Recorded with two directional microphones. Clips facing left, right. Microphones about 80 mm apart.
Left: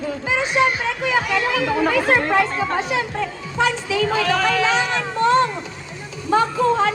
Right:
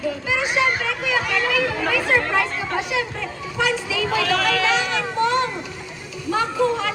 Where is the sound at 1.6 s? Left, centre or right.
Left.